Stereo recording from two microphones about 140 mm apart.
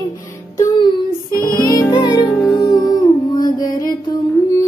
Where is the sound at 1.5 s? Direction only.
30° left (ahead or behind).